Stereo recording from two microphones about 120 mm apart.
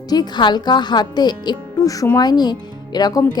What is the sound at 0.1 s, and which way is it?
A woman's voice, 35° left (ahead or behind).